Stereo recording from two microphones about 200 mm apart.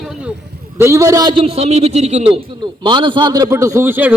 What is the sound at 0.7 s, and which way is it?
A man's voice, 15° right (ahead or behind).